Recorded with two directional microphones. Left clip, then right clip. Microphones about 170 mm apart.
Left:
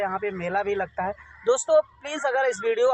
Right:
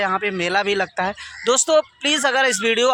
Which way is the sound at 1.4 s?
50° right (ahead or behind).